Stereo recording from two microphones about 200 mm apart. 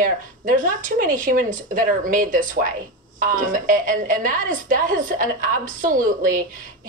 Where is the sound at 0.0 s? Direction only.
40° right (ahead or behind).